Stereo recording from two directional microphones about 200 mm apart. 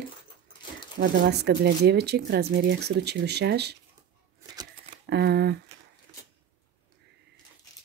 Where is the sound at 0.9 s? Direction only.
55° right (ahead or behind).